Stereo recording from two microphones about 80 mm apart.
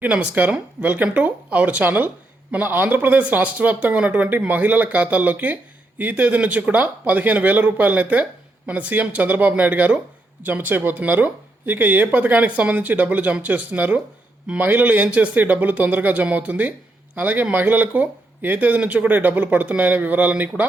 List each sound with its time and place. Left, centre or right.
0.0 s speech: centre